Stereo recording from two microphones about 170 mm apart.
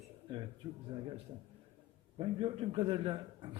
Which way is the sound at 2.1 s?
35° right (ahead or behind).